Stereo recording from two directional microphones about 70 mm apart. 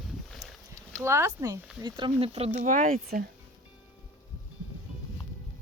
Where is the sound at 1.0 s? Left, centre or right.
Right.